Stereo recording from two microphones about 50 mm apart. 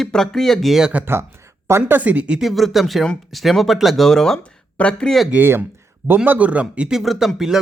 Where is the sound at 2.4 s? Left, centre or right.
Centre.